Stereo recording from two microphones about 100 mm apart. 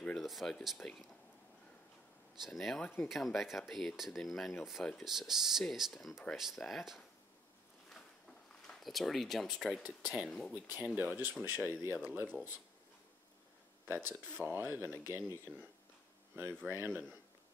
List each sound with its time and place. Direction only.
0.0 s speech: 5° left (ahead or behind)
2.4 s speech: centre (ahead or behind)
7.9 s a sound: 5° left (ahead or behind)
9.8 s speech: 10° right (ahead or behind)
10.5 s speech: 20° right (ahead or behind)
14.0 s speech: 20° right (ahead or behind)
15.5 s speech: 5° right (ahead or behind)
16.3 s speech: 20° right (ahead or behind)